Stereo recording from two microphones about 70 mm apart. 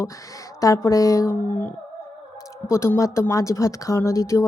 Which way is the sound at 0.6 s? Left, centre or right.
Left.